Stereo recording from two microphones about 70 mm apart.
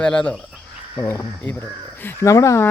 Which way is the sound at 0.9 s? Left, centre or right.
Left.